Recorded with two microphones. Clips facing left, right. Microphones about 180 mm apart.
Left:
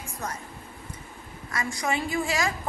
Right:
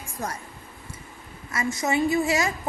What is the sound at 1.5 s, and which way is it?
Speech, 25° right (ahead or behind).